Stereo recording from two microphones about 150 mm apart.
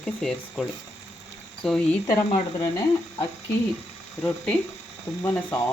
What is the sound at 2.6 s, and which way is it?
Speech, 20° left (ahead or behind).